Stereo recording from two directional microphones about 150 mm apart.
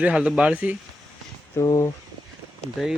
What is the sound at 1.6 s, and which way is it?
Speech, 20° left (ahead or behind).